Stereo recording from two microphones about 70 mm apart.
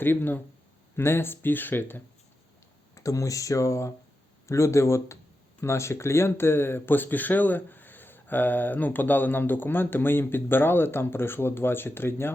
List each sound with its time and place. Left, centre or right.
0.0 s speech: left
2.9 s speech: left